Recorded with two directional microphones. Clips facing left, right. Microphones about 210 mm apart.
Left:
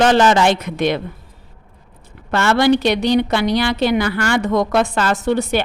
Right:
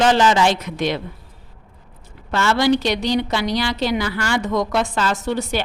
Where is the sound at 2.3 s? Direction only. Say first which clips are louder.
Left 3 dB; 60° left (ahead or behind).